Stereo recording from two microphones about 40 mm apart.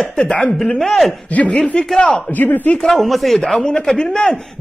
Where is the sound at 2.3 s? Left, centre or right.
Left.